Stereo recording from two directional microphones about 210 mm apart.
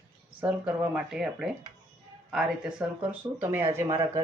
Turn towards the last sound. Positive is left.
turn(degrees=-15)  # may be behind; listen again after turning